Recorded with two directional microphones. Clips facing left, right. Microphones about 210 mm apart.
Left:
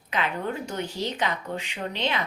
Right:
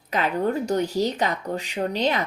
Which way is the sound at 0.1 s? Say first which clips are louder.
Right 6 dB; 40° right (ahead or behind).